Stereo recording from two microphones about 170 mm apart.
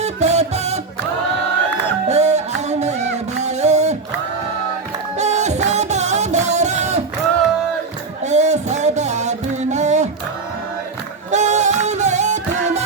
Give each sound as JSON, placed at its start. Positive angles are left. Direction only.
{"t": 0.0, "sound": "music", "side_deg": -40}
{"t": 2.0, "sound": "music", "side_deg": -40}
{"t": 5.1, "sound": "music", "side_deg": -40}
{"t": 8.2, "sound": "music", "side_deg": -45}
{"t": 11.3, "sound": "music", "side_deg": -45}